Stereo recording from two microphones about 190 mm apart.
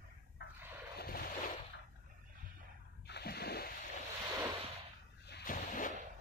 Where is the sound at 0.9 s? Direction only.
50° left (ahead or behind).